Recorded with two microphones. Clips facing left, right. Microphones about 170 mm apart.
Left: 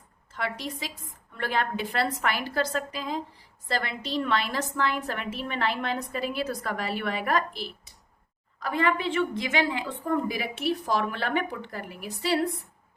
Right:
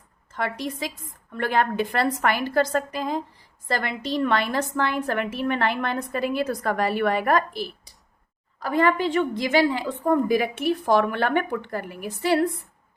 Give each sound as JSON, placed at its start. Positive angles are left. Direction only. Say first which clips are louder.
{"t": 0.3, "sound": "a woman's voice", "louder": "right 5 dB", "side_deg": -50}